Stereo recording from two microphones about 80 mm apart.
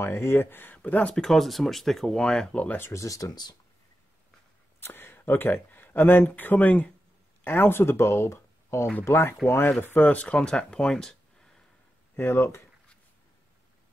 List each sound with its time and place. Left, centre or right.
0.0 s speech: left
1.1 s speech: centre
2.8 s speech: left
4.7 s speech: left; by 11.6 s centre
12.2 s speech: left